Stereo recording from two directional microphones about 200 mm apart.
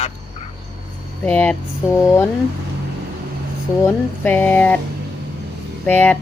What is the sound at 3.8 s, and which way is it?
Speech, 10° left (ahead or behind).